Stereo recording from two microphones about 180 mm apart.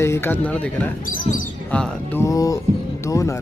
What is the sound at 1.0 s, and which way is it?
Speech, 50° left (ahead or behind).